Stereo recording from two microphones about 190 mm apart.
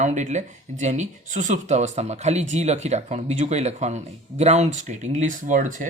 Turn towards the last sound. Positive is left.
turn(degrees=-45)  # may be behind; listen again after turning